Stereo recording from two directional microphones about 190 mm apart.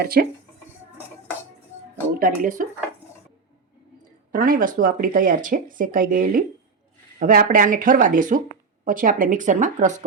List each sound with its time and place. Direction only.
0.0 s speech: 50° right (ahead or behind)
2.1 s speech: 45° right (ahead or behind)
4.3 s speech: 45° right (ahead or behind)